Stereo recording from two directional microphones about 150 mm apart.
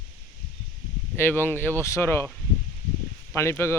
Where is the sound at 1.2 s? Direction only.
15° left (ahead or behind).